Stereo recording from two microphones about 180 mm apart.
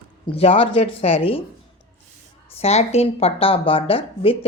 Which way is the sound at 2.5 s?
35° left (ahead or behind).